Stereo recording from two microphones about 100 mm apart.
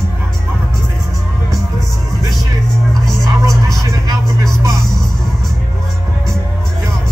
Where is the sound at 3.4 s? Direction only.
30° right (ahead or behind).